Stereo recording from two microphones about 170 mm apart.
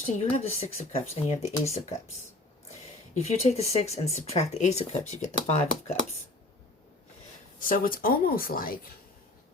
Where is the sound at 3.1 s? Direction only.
40° left (ahead or behind).